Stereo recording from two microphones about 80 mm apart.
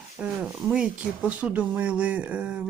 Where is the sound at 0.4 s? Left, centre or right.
Centre.